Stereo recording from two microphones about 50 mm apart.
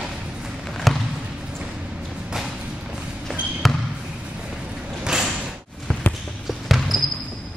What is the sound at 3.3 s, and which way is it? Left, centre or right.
Trickle, centre.